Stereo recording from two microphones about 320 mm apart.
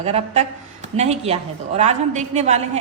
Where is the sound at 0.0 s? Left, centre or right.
Centre.